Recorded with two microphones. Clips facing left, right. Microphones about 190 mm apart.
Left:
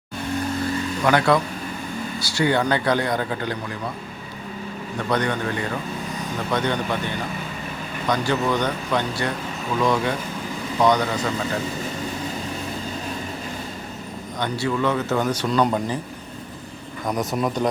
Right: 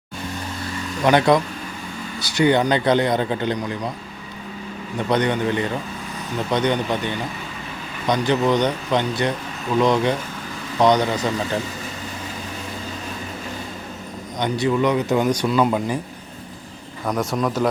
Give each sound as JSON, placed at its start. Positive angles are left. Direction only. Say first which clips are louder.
{"t": 1.0, "sound": "speech", "louder": "right 3 dB", "side_deg": -20}
{"t": 5.0, "sound": "speech", "louder": "right 4 dB", "side_deg": -20}
{"t": 8.0, "sound": "speech", "louder": "right 3 dB", "side_deg": -20}
{"t": 14.3, "sound": "a man's voice", "louder": "right 4 dB", "side_deg": -20}
{"t": 17.1, "sound": "speech", "louder": "right 1 dB", "side_deg": 10}